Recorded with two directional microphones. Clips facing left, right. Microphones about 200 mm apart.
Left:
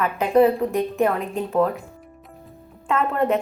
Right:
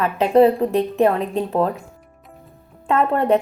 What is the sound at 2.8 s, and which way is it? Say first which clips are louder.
Speech: right 3 dB; 35° right (ahead or behind).